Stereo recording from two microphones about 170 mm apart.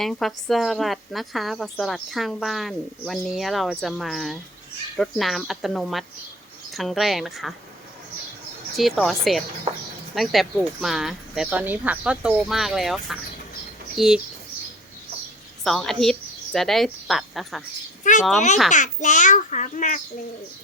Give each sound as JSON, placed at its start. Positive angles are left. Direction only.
{"t": 0.0, "sound": "speech", "side_deg": 0}
{"t": 8.7, "sound": "speech", "side_deg": 0}
{"t": 15.6, "sound": "speech", "side_deg": 0}
{"t": 18.7, "sound": "a child's voice", "side_deg": 45}